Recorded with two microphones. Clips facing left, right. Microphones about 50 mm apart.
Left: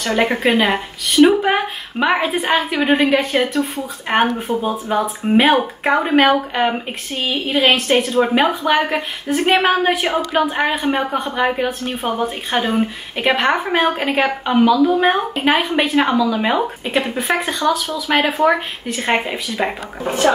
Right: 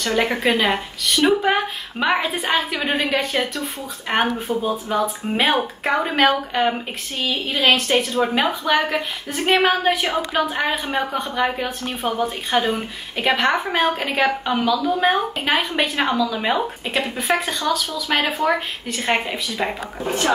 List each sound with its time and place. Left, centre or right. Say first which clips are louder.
0.0 s a woman's voice: left 3 dB; centre
8.0 s speech: left 4 dB; centre
17.2 s speech: left 2 dB; left
17.5 s speech: left 4 dB; centre